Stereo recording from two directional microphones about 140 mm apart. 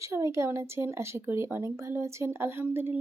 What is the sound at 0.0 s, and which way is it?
Speech, 20° right (ahead or behind).